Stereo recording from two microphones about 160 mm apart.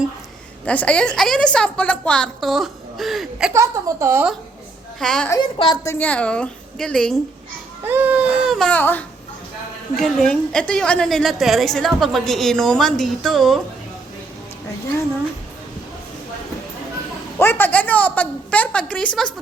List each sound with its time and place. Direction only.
0.6 s a woman's voice: 10° left (ahead or behind)
3.5 s speech: 20° right (ahead or behind)
4.9 s a woman's voice: 5° left (ahead or behind)
5.5 s a woman's voice: 25° left (ahead or behind); by 7.2 s centre (ahead or behind)
7.9 s a woman's voice: 10° right (ahead or behind)
17.3 s a woman's voice: 15° left (ahead or behind)